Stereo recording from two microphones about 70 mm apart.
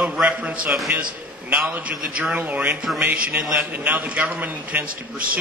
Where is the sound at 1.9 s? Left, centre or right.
Centre.